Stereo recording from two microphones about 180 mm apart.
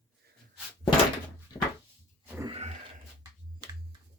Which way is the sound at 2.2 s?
10° right (ahead or behind).